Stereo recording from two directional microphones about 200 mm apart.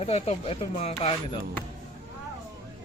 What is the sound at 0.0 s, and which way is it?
Speech, 30° left (ahead or behind).